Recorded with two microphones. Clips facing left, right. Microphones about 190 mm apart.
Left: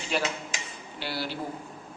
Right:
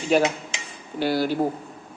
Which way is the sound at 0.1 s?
45° right (ahead or behind).